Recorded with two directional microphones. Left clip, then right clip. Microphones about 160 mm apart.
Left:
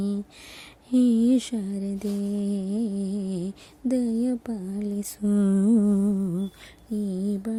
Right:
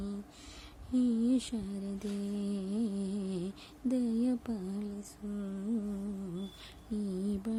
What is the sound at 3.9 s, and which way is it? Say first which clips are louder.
Speech: left 7 dB; 30° left (ahead or behind).